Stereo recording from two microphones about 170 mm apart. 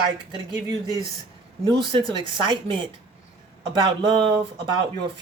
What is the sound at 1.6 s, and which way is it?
Speech, 25° right (ahead or behind).